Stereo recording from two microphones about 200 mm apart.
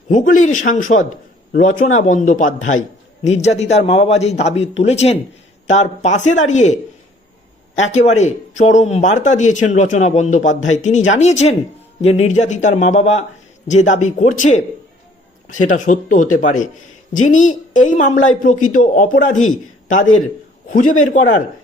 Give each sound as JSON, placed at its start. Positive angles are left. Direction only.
{"t": 0.1, "sound": "speech", "side_deg": 40}
{"t": 7.8, "sound": "speech", "side_deg": 35}